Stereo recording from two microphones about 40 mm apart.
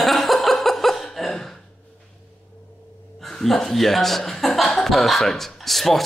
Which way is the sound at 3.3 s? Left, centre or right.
Centre.